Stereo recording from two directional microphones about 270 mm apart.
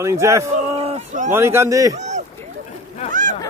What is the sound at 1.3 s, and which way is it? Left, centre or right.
Speech, centre.